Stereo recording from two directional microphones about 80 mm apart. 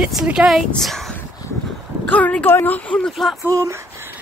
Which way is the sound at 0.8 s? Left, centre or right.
Centre.